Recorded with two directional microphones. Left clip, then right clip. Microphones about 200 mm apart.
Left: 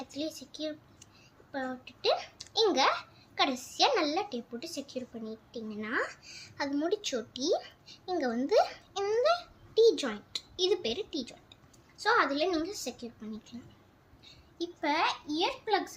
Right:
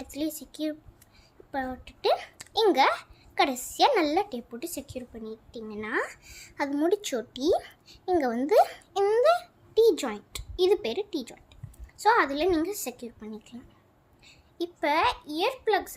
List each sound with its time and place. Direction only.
0.0 s a child's voice: 55° right (ahead or behind)